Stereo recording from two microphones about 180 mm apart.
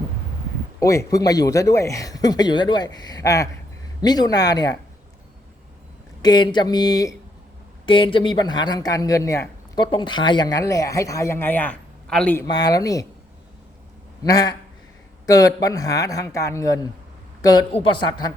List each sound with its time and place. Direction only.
0.8 s speech: 15° left (ahead or behind)
6.2 s speech: 25° left (ahead or behind)
12.5 s speech: 20° left (ahead or behind)
14.3 s a woman's voice: 20° left (ahead or behind)